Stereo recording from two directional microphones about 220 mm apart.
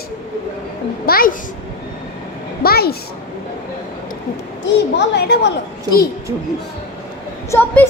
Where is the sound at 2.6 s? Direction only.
45° left (ahead or behind).